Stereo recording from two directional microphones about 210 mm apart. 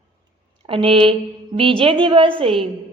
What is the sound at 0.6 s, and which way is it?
A woman's voice, 25° right (ahead or behind).